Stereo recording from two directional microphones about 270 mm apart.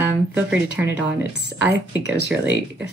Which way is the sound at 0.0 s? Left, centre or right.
Centre.